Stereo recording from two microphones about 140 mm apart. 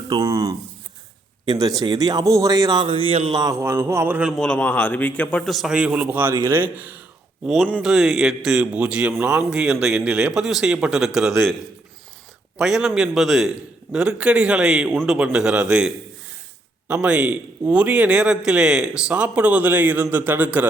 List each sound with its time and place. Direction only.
0.1 s speech: 25° right (ahead or behind); by 3.3 s 40° right (ahead or behind)
3.3 s speech: 25° right (ahead or behind)
4.4 s a man's voice: 5° left (ahead or behind); by 7.0 s 10° right (ahead or behind)
7.4 s a man's voice: centre (ahead or behind)
12.5 s a man's voice: 5° right (ahead or behind)
16.9 s a man's voice: 10° right (ahead or behind)